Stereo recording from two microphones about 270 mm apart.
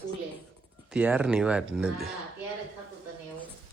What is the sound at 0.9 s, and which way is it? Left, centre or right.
Speech, centre.